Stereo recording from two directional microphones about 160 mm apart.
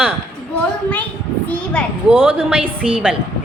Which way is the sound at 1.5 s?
5° left (ahead or behind).